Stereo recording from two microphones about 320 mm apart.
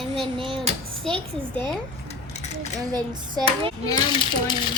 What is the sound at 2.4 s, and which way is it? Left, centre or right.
Dishes, left.